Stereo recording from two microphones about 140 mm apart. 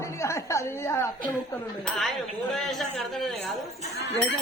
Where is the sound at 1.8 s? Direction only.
5° left (ahead or behind).